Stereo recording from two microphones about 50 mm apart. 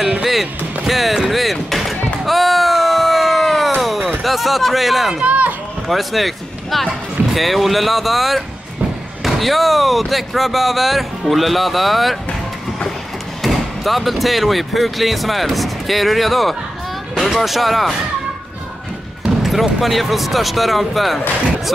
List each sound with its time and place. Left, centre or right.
0.2 s music: centre
2.2 s a sound: centre
4.2 s speech: centre
5.2 s run: right
5.9 s speech: centre
13.4 s speech: centre
19.2 s speech: centre